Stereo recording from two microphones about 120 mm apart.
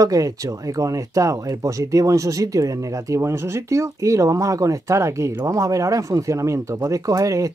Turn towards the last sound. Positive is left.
turn(degrees=-25)  # may be behind; listen again after turning